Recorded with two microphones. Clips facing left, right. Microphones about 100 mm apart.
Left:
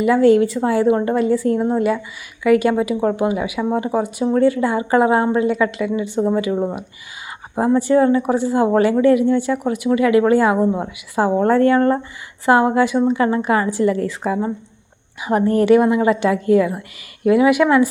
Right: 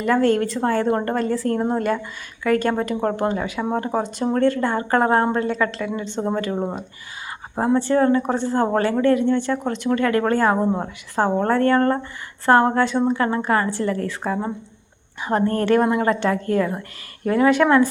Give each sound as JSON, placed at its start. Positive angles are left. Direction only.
{"t": 0.0, "sound": "a woman's voice", "side_deg": 5}
{"t": 7.8, "sound": "speech", "side_deg": 15}
{"t": 15.2, "sound": "speech", "side_deg": 15}